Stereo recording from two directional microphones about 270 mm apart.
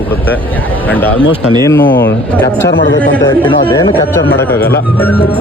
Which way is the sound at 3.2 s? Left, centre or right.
Centre.